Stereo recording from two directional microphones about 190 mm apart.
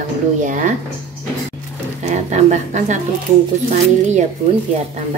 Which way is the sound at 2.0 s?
35° right (ahead or behind).